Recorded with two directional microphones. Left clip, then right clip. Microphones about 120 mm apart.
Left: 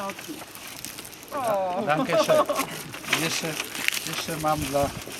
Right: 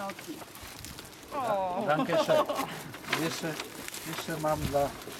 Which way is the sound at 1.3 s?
15° right (ahead or behind).